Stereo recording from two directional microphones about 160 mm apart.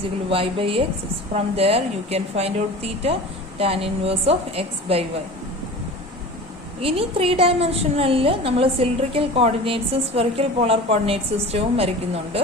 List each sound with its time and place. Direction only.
0.3 s a woman's voice: 35° right (ahead or behind)
6.8 s a woman's voice: 35° right (ahead or behind)